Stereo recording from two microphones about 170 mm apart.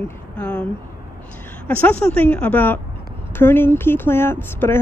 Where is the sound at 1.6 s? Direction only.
10° left (ahead or behind).